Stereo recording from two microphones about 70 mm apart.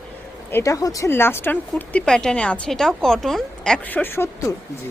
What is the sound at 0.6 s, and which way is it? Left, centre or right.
Speech, left.